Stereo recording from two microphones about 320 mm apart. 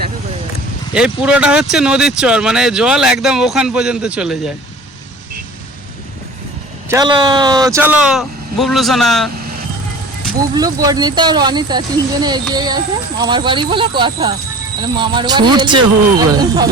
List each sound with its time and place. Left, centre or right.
0.9 s speech: centre
6.8 s speech: centre
10.5 s speech: centre